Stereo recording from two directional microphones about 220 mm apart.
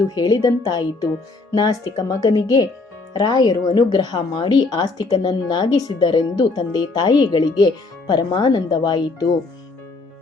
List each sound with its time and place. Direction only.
0.1 s speech: 15° left (ahead or behind)